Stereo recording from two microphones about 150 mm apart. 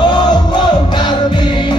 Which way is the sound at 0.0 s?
30° left (ahead or behind).